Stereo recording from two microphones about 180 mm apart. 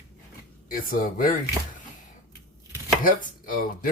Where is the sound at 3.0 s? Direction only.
50° left (ahead or behind).